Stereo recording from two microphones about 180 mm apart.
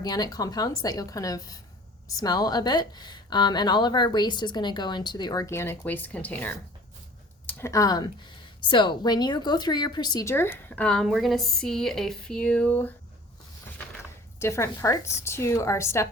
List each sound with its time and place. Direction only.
0.0 s speech: 20° left (ahead or behind)
14.3 s speech: 15° left (ahead or behind)